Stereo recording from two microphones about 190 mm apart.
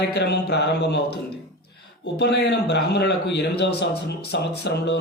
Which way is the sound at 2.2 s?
60° left (ahead or behind).